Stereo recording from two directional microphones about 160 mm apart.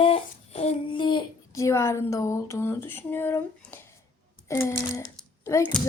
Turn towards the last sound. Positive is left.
turn(degrees=15)  # may be behind; listen again after turning